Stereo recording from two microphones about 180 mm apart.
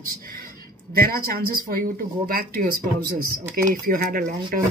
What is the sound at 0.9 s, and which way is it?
Speech, 55° right (ahead or behind).